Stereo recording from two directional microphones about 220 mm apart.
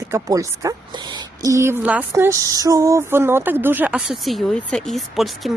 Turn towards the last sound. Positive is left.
turn(degrees=0)  # may be behind; listen again after turning